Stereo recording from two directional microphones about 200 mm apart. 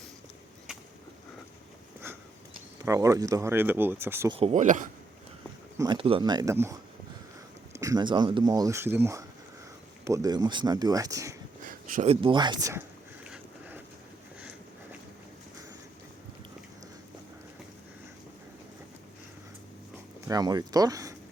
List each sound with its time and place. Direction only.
2.7 s speech: 15° right (ahead or behind)
4.3 s speech: 30° right (ahead or behind)
5.7 s speech: 20° right (ahead or behind)
7.8 s speech: 20° right (ahead or behind)
11.6 s a sound: 45° right (ahead or behind)
12.0 s speech: 25° right (ahead or behind)
13.3 s boat: 10° right (ahead or behind)
20.2 s speech: 20° right (ahead or behind)